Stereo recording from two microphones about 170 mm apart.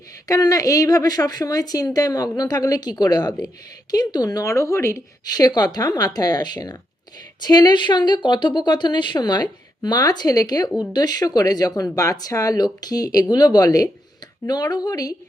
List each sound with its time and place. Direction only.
0.3 s a woman's voice: 20° left (ahead or behind)